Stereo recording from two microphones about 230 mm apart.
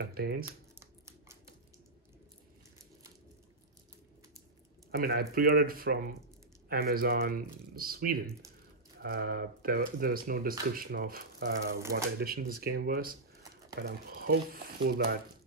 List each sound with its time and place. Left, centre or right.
0.0 s speech: right
0.7 s scissors: centre
4.9 s speech: right